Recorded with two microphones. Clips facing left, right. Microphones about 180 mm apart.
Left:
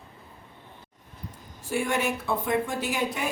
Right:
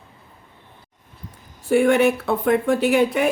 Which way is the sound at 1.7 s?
65° right (ahead or behind).